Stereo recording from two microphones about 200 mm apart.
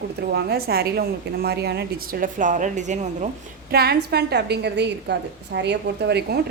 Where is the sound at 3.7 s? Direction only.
50° right (ahead or behind).